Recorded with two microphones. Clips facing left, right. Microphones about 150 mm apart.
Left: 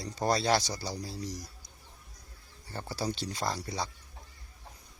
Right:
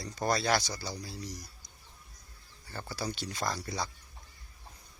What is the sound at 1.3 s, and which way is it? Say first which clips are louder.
Bird: left 4 dB; 40° left (ahead or behind).